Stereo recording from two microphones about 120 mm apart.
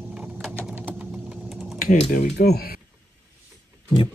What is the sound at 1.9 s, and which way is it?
Speech, 85° left.